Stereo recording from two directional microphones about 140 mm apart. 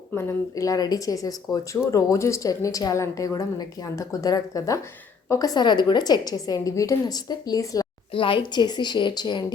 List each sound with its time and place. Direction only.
0.1 s speech: 15° left (ahead or behind)
8.1 s a woman's voice: 40° left (ahead or behind)